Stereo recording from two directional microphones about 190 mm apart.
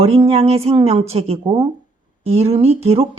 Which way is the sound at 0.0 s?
30° right (ahead or behind).